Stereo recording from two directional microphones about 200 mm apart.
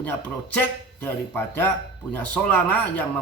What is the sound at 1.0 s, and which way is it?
A man's voice, 10° left (ahead or behind).